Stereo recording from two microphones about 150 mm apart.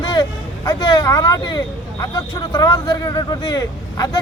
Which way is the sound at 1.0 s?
25° left (ahead or behind).